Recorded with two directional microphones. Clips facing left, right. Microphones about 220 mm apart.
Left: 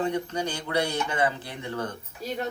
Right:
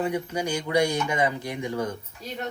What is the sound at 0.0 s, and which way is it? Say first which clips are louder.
Speech: right 1 dB; 10° right (ahead or behind).